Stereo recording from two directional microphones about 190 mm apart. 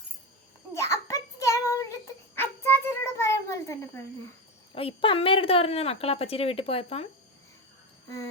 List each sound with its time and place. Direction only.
0.7 s child singing: 15° left (ahead or behind)
4.7 s a woman's voice: 30° left (ahead or behind)